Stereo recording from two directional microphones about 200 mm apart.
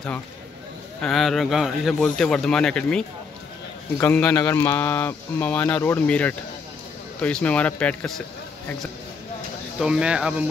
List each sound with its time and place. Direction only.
1.0 s speech: centre (ahead or behind)
9.8 s speech: 5° right (ahead or behind)